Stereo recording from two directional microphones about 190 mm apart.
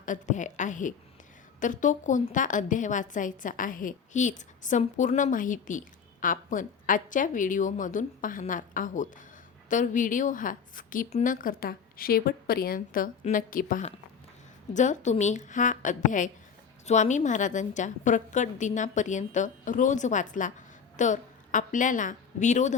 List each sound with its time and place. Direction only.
0.0 s a woman's voice: 40° left (ahead or behind)